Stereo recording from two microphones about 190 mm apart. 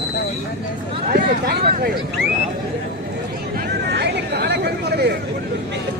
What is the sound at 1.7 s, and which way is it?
Speech, 55° right (ahead or behind).